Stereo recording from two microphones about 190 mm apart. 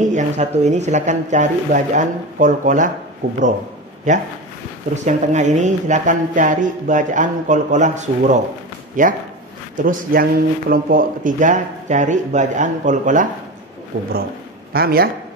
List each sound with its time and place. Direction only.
0.0 s speech: 40° right (ahead or behind)
13.9 s speech: 80° right
14.7 s a man's voice: 55° right (ahead or behind)